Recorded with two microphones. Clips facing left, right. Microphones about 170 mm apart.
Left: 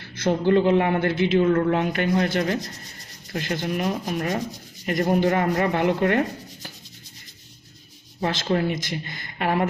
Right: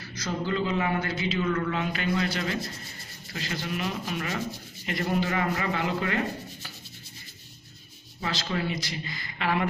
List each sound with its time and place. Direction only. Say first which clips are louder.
0.1 s a man's voice: left 10 dB; 55° left (ahead or behind)
4.1 s sanding: left 6 dB; 40° left (ahead or behind)
4.8 s a man's voice: left 7 dB; 40° left (ahead or behind)
8.2 s a man's voice: left 7 dB; 50° left (ahead or behind)